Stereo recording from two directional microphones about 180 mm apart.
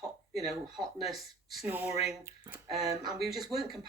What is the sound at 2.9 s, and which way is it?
Speech, 20° right (ahead or behind).